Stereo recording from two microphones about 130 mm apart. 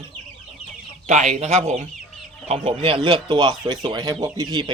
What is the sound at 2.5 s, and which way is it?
Speech, 45° right (ahead or behind).